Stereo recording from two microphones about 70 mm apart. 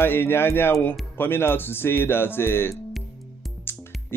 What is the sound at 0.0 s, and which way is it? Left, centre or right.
Speech, left.